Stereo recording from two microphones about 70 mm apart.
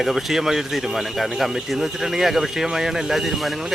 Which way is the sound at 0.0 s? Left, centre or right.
Centre.